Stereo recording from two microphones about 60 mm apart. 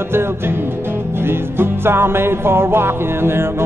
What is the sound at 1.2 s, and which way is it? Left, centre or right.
Music, right.